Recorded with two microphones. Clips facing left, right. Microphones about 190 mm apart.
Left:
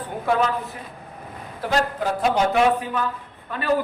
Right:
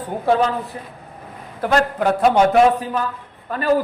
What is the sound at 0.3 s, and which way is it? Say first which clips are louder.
Speech: right 4 dB; 30° right (ahead or behind).